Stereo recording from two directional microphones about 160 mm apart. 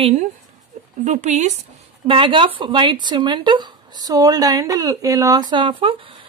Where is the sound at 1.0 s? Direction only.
50° right (ahead or behind).